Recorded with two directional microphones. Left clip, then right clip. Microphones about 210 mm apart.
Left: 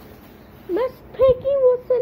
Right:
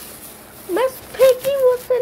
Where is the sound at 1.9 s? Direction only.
15° left (ahead or behind).